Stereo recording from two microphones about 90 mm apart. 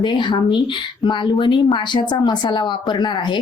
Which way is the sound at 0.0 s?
60° left (ahead or behind).